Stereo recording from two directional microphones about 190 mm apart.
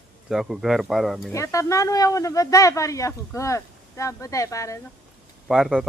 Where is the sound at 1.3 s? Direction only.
15° left (ahead or behind).